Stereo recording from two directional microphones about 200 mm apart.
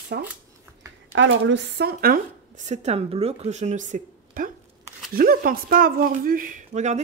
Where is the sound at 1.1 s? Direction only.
70° right (ahead or behind).